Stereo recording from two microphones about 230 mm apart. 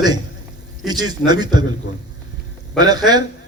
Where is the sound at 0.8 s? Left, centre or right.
Centre.